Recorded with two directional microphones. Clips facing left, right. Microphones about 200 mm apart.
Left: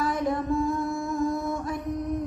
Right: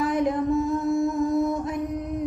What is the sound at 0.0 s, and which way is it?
Mantra, 20° right (ahead or behind).